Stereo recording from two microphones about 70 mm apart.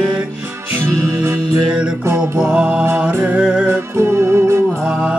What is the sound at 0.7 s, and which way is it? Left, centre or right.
Music, right.